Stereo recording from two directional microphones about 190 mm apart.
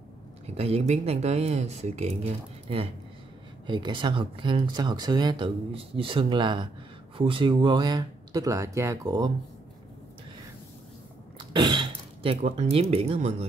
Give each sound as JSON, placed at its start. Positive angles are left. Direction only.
{"t": 0.6, "sound": "speech", "side_deg": -35}
{"t": 11.3, "sound": "a sound", "side_deg": -25}
{"t": 12.9, "sound": "speech", "side_deg": -35}